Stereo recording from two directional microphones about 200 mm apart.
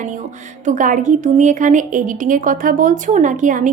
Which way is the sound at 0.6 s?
40° right (ahead or behind).